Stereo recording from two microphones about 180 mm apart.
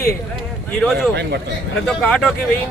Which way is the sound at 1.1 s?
70° right (ahead or behind).